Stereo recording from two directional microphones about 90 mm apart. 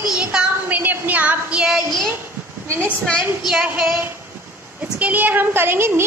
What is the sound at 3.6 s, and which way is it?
A woman's voice, 15° right (ahead or behind).